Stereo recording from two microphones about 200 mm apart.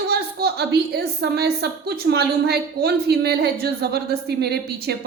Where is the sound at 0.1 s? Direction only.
55° right (ahead or behind).